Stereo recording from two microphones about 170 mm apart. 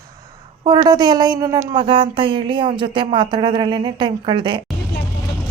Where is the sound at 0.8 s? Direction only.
25° right (ahead or behind).